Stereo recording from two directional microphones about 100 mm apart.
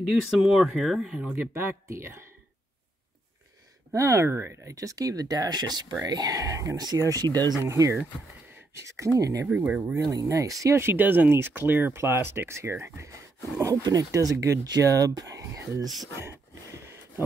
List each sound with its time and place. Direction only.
0.0 s speech: 5° right (ahead or behind); by 2.2 s 25° right (ahead or behind)
3.9 s speech: 30° right (ahead or behind)
7.6 s speech: 30° right (ahead or behind)
9.5 s speech: 15° right (ahead or behind)
10.2 s speech: 35° right (ahead or behind)